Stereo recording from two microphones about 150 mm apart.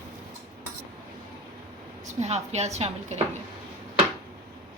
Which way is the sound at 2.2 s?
50° right (ahead or behind).